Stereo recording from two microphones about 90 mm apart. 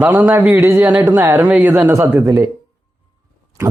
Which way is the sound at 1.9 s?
30° right (ahead or behind).